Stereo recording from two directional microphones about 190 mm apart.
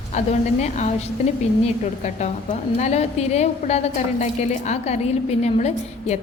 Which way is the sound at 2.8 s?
35° left (ahead or behind).